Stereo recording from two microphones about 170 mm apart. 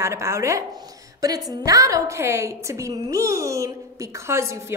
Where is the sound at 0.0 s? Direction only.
15° right (ahead or behind).